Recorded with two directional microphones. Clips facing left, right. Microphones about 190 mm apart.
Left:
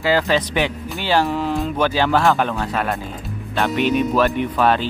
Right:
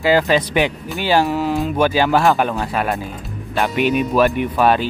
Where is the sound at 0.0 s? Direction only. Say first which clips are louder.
Right 3 dB; 15° right (ahead or behind).